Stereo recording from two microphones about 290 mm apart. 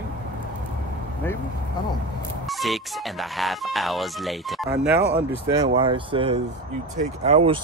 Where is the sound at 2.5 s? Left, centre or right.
Centre.